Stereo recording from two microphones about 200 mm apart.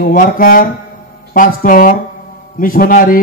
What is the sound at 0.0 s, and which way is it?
A man's voice, 40° left (ahead or behind).